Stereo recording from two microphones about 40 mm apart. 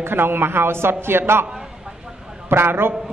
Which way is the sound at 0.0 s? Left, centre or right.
Right.